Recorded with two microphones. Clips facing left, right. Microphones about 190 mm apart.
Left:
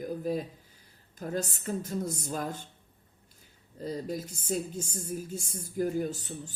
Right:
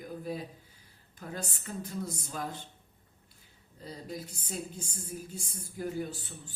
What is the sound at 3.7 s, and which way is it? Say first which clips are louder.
A woman's voice: left 7 dB; 45° left (ahead or behind).